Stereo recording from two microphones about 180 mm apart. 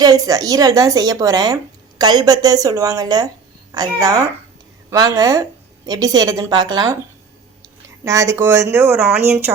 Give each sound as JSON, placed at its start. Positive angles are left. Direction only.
{"t": 0.0, "sound": "a woman's voice", "side_deg": -20}
{"t": 8.0, "sound": "speech", "side_deg": -20}